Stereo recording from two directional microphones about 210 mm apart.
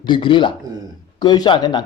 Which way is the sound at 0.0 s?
25° left (ahead or behind).